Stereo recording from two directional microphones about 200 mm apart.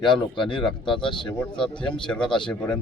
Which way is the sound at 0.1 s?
Centre (ahead or behind).